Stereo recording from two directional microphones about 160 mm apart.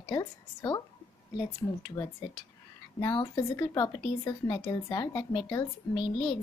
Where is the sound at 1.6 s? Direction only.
30° left (ahead or behind).